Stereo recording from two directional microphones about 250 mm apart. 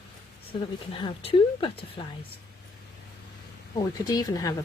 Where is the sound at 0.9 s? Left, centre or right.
Left.